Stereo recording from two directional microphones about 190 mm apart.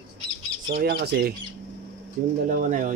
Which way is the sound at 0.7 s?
55° right (ahead or behind).